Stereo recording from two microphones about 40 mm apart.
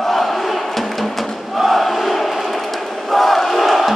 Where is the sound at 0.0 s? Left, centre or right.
Centre.